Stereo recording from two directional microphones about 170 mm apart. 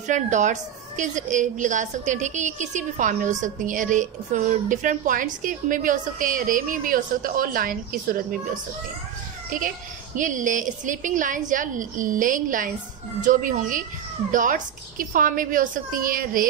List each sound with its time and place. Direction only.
0.1 s a woman's voice: 45° right (ahead or behind)
10.1 s a woman's voice: 50° right (ahead or behind)